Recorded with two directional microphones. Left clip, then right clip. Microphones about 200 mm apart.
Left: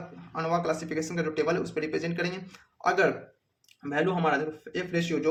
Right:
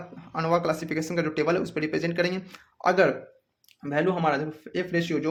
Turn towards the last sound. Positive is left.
turn(degrees=-35)  # may be behind; listen again after turning